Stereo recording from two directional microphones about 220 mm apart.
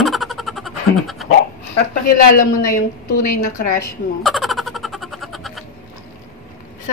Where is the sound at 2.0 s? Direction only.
40° left (ahead or behind).